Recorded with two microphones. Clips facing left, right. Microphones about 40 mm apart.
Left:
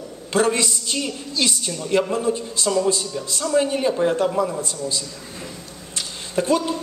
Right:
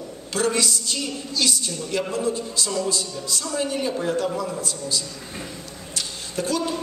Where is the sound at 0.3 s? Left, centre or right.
Left.